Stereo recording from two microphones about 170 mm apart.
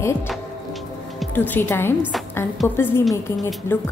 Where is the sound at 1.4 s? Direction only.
10° left (ahead or behind).